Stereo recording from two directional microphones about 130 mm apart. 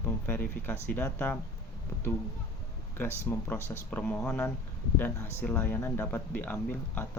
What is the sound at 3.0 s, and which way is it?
Speech, 15° left (ahead or behind).